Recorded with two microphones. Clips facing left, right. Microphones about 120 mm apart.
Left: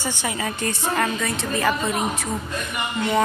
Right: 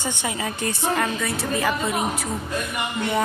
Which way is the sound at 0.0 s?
15° right (ahead or behind).